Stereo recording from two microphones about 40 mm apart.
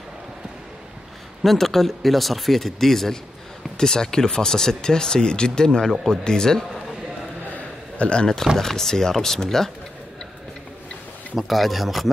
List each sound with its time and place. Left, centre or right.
1.4 s speech: centre
8.0 s speech: left
8.5 s speech: centre
11.3 s speech: centre